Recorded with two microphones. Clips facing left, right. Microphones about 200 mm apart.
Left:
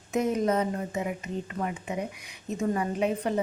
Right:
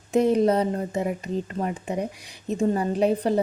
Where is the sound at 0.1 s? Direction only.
30° right (ahead or behind).